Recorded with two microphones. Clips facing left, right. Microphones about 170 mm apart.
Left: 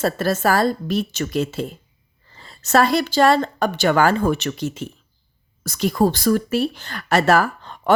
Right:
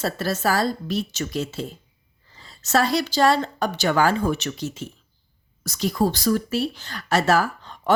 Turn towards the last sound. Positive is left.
turn(degrees=60)  # may be behind; listen again after turning